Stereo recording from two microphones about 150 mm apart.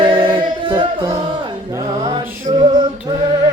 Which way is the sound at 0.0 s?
30° right (ahead or behind).